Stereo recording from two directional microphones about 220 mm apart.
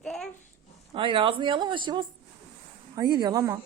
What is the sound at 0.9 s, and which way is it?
A woman's voice, 25° right (ahead or behind).